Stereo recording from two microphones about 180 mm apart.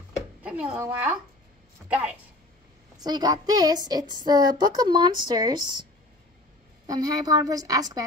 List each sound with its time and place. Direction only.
0.1 s a sound: 5° right (ahead or behind)
1.9 s speech: 5° right (ahead or behind)
3.0 s speech: 20° right (ahead or behind)
6.9 s speech: 20° right (ahead or behind)